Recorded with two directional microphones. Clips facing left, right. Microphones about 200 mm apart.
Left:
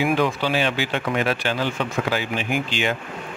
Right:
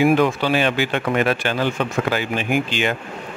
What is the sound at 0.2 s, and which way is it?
Speech, 55° right (ahead or behind).